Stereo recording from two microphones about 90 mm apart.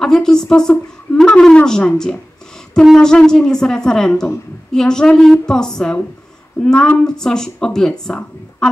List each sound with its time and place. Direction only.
0.0 s a woman's voice: 5° left (ahead or behind)